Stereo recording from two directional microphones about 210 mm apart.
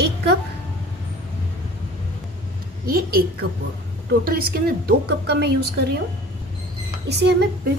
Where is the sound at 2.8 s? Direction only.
45° right (ahead or behind).